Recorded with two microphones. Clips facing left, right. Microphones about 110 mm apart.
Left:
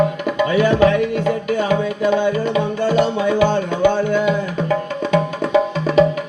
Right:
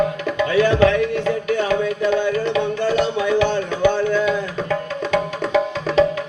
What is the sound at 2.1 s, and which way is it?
Music, 15° left (ahead or behind).